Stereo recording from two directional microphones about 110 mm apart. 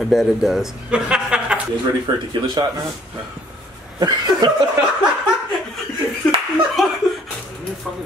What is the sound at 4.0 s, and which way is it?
Speech, 40° right (ahead or behind).